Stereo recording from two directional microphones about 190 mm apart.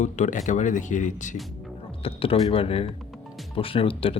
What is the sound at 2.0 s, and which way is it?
Speech, 30° left (ahead or behind).